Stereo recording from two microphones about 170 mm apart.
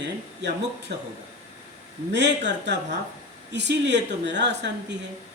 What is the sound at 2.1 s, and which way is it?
Speech, 90° right.